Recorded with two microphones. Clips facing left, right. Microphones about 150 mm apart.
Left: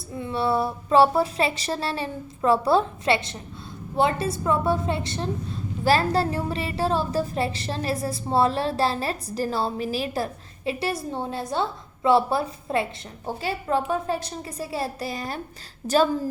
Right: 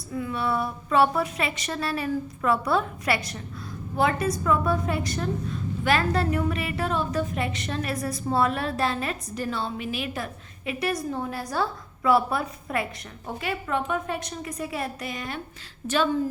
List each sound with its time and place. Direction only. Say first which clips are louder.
0.1 s a woman's voice: left 3 dB; 30° left (ahead or behind)